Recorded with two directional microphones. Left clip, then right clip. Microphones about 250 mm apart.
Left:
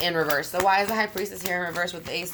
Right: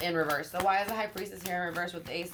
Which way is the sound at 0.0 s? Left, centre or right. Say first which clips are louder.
Left 6 dB; left.